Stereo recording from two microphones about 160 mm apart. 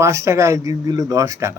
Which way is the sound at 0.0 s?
20° right (ahead or behind).